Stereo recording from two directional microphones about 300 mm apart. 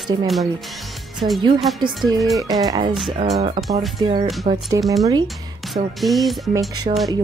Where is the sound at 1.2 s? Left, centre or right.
Centre.